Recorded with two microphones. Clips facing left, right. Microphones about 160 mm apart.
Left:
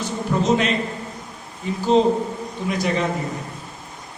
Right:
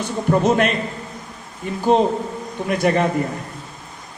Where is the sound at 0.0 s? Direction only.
55° right (ahead or behind).